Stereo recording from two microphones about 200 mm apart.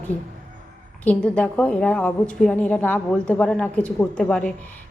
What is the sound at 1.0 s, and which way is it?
A woman's voice, 5° left (ahead or behind).